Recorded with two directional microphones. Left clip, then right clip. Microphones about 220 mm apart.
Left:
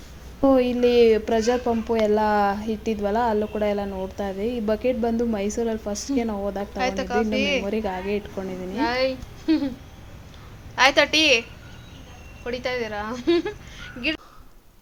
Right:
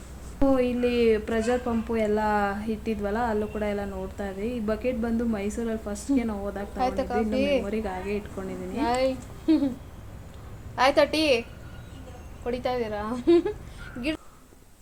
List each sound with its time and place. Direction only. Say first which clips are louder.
0.5 s speech: left 7 dB; 30° left (ahead or behind)
5.9 s a woman's voice: left 1 dB; centre (ahead or behind)
6.1 s speech: left 5 dB; 20° left (ahead or behind)
6.7 s a woman's voice: left 2 dB; centre (ahead or behind)
7.6 s speech: left 4 dB; 25° left (ahead or behind)
8.8 s a woman's voice: left 2 dB; centre (ahead or behind)
10.8 s a woman's voice: left 4 dB; 5° left (ahead or behind)
12.5 s a woman's voice: left 1 dB; centre (ahead or behind)